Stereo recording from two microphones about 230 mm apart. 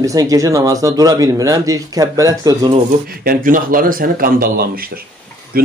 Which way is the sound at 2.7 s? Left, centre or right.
Right.